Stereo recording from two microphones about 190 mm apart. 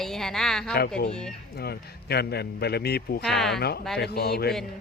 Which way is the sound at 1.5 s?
55° left (ahead or behind).